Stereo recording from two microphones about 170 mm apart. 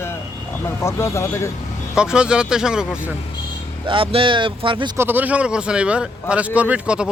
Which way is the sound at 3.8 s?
30° right (ahead or behind).